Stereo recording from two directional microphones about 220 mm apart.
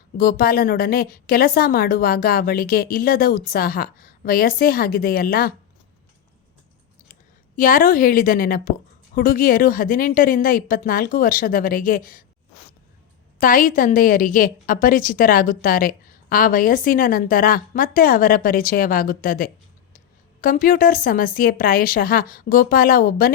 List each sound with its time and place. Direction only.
0.2 s a woman's voice: 40° left (ahead or behind)
7.1 s a woman's voice: 40° left (ahead or behind)
13.4 s a woman's voice: 40° left (ahead or behind)